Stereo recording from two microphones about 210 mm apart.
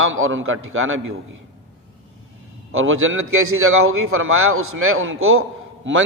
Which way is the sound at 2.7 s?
70° right (ahead or behind).